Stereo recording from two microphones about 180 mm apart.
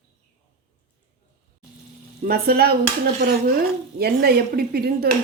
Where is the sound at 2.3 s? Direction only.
60° right (ahead or behind).